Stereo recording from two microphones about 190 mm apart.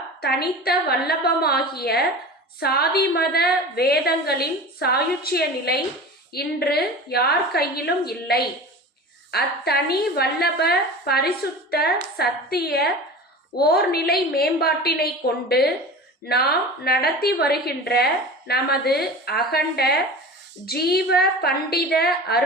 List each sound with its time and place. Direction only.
0.2 s a woman's voice: 55° left (ahead or behind)